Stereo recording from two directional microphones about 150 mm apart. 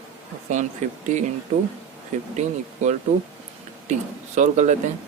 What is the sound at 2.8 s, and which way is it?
Speech, 55° right (ahead or behind).